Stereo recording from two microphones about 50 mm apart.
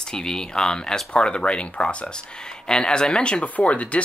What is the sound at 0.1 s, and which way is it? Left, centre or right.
Speech, centre.